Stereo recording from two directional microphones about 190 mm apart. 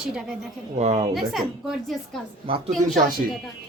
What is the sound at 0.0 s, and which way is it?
Speech, centre (ahead or behind).